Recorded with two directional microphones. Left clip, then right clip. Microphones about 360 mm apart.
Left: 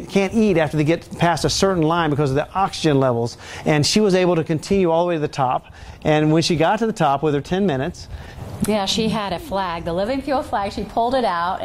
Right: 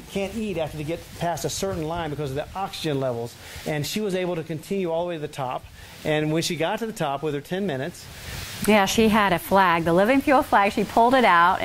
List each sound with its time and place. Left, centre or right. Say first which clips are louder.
0.1 s speech: left 10 dB; left
8.6 s a woman's voice: right 2 dB; right